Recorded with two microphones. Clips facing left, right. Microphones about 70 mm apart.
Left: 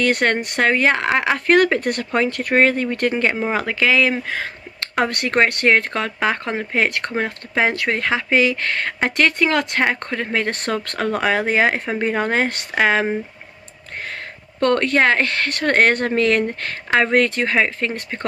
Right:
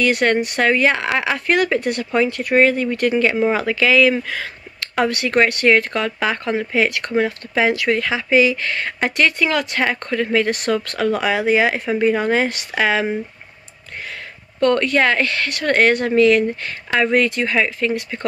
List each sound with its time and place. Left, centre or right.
0.0 s speech: left
1.6 s speech: left
14.6 s speech: left